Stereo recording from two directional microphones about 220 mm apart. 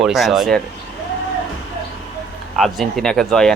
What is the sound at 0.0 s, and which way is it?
Speech, centre (ahead or behind).